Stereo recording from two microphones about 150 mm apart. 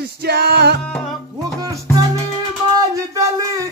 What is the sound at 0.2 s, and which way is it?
Music, 90° right.